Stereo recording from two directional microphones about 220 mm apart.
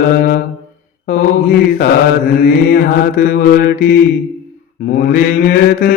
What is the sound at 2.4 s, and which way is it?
Mantra, 40° left (ahead or behind).